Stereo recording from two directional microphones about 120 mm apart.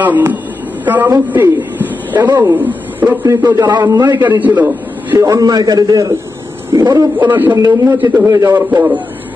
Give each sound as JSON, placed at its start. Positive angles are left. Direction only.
{"t": 0.0, "sound": "a man's voice", "side_deg": -15}
{"t": 4.4, "sound": "a man's voice", "side_deg": -15}
{"t": 5.2, "sound": "a man's voice", "side_deg": -30}
{"t": 7.2, "sound": "a man's voice", "side_deg": -15}
{"t": 7.5, "sound": "a man's voice", "side_deg": -25}
{"t": 8.3, "sound": "a man's voice", "side_deg": -30}
{"t": 8.5, "sound": "a man's voice", "side_deg": -15}